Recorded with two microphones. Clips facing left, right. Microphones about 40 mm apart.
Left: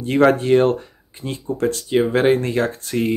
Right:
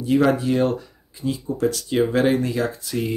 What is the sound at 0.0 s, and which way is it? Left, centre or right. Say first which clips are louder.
Speech: left 3 dB; left.